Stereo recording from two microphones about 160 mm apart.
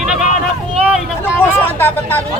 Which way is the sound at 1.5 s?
10° left (ahead or behind).